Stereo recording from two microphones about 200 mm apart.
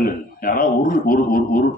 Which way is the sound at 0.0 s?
45° left (ahead or behind).